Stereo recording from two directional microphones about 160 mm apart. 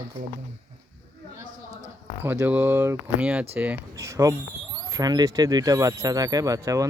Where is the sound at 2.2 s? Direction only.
15° right (ahead or behind).